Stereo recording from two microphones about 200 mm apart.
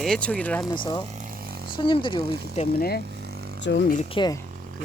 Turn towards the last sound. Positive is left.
turn(degrees=20)  # may be behind; listen again after turning